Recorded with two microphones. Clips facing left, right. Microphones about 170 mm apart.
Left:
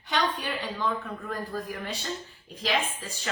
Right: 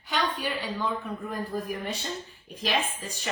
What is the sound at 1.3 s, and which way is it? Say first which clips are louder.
Speech: right 1 dB; 20° right (ahead or behind).